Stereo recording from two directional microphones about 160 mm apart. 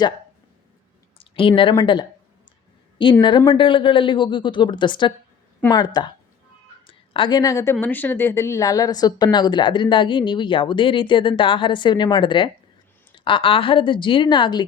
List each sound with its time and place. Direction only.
1.2 s a woman's voice: 35° left (ahead or behind)